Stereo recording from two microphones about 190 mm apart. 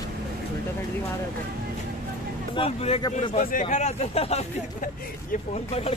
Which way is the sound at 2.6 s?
35° left (ahead or behind).